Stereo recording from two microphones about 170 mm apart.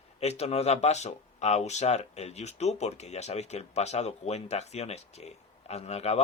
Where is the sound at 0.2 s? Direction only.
40° left (ahead or behind).